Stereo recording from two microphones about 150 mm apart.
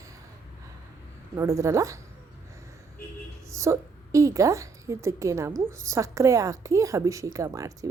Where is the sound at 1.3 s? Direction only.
20° right (ahead or behind).